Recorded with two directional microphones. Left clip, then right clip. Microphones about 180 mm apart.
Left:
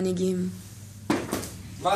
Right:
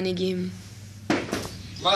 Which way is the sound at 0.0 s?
50° left (ahead or behind).